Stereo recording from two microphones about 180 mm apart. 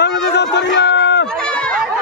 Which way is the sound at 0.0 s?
70° left (ahead or behind).